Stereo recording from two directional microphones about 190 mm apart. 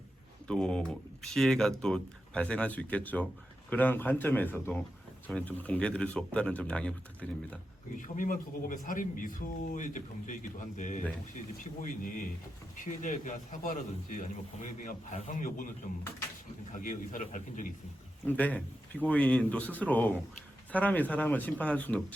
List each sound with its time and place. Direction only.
0.4 s speech: 5° left (ahead or behind)
7.9 s a man's voice: 45° left (ahead or behind)
16.7 s a man's voice: 45° left (ahead or behind)
18.3 s speech: 10° left (ahead or behind)